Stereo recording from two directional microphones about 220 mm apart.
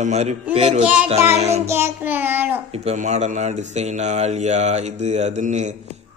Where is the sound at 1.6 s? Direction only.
10° right (ahead or behind).